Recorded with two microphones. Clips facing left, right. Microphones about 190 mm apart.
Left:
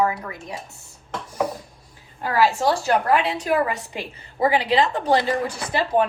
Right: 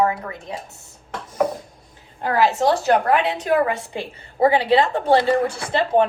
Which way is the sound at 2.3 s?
20° right (ahead or behind).